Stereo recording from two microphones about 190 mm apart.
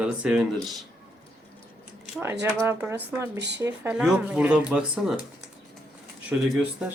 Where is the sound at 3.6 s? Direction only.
10° right (ahead or behind).